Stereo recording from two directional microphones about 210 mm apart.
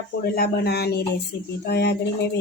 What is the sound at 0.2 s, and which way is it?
Speech, 45° left (ahead or behind).